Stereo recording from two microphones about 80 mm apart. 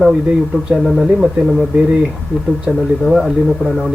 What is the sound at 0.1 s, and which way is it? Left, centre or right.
Speech, centre.